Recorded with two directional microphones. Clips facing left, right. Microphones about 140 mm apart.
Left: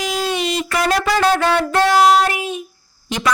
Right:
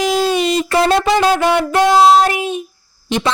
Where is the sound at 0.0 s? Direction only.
30° right (ahead or behind).